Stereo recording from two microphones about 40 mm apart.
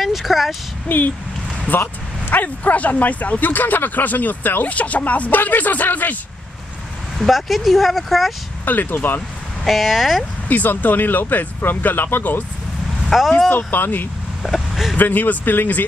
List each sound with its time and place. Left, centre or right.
0.0 s speech: centre
0.8 s speech: left
4.6 s speech: left
7.2 s speech: centre
8.6 s speech: left
9.7 s speech: centre
10.5 s speech: left
13.1 s speech: centre
13.5 s speech: left
14.4 s vehicle: centre
15.0 s speech: left